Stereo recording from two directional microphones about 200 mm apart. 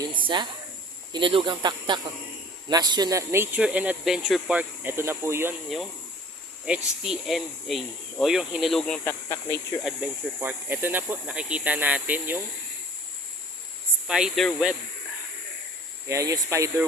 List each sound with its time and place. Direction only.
0.3 s speech: 25° right (ahead or behind)
5.6 s speech: centre (ahead or behind)
9.8 s speech: 10° right (ahead or behind)
14.1 s speech: centre (ahead or behind)
16.0 s speech: 15° right (ahead or behind)